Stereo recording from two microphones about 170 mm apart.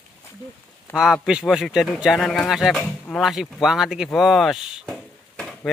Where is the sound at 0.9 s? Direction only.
5° right (ahead or behind).